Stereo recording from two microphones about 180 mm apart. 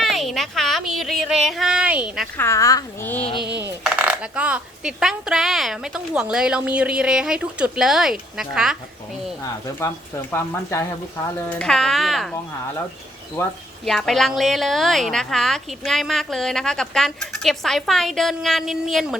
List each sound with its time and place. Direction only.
0.0 s a woman's voice: centre (ahead or behind)
2.4 s speech: 15° left (ahead or behind)
3.2 s speech: 35° left (ahead or behind)
3.8 s a woman's voice: 5° right (ahead or behind)
9.8 s speech: 10° left (ahead or behind)
11.4 s a woman's voice: 5° left (ahead or behind)
13.4 s speech: 15° left (ahead or behind)
13.8 s a woman's voice: centre (ahead or behind)